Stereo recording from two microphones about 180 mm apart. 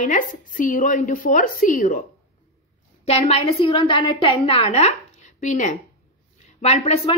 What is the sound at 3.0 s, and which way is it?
A woman's voice, 35° left (ahead or behind).